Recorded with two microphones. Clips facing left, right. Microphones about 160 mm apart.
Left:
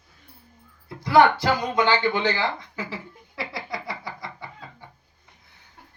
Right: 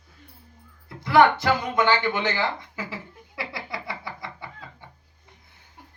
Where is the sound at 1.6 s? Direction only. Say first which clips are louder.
Even; 20° left (ahead or behind).